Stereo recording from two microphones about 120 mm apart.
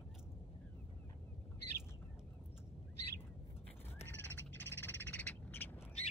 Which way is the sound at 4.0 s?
15° left (ahead or behind).